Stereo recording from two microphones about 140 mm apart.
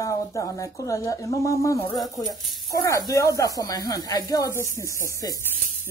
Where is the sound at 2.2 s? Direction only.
Centre (ahead or behind).